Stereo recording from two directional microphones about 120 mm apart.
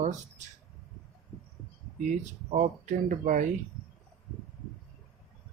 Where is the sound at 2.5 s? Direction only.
80° right.